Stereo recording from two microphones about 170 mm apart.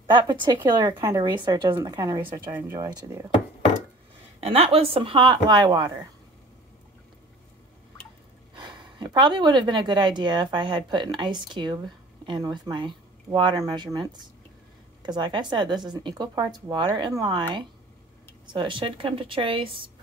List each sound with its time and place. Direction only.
0.0 s speech: 25° right (ahead or behind)
4.4 s speech: 35° right (ahead or behind)
8.5 s speech: 25° right (ahead or behind)
15.0 s speech: 25° right (ahead or behind)